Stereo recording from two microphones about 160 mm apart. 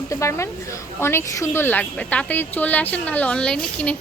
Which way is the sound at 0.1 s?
20° left (ahead or behind).